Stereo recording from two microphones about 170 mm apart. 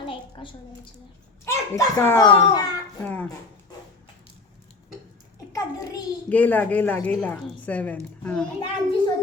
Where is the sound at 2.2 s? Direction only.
25° left (ahead or behind).